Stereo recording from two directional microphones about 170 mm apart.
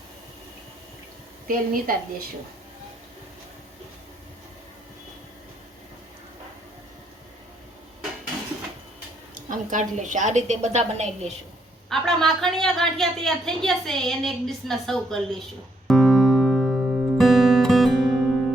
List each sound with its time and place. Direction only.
1.5 s a woman's voice: 55° right (ahead or behind)
9.5 s a woman's voice: 50° right (ahead or behind)
11.9 s speech: centre (ahead or behind)
15.9 s music: centre (ahead or behind)